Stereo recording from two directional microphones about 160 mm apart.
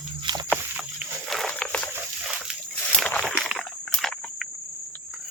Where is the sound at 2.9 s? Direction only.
5° left (ahead or behind).